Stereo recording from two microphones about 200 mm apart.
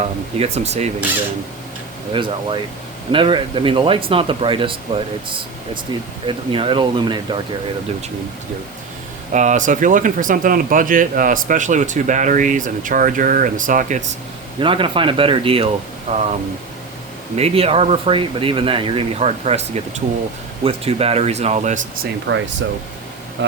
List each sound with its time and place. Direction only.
0.0 s speech: 30° right (ahead or behind)
2.1 s speech: 25° right (ahead or behind)
5.9 s speech: 20° right (ahead or behind)
9.3 s speech: 35° right (ahead or behind)
14.6 s speech: 25° right (ahead or behind)
17.3 s speech: 30° right (ahead or behind)
23.4 s speech: 70° right (ahead or behind)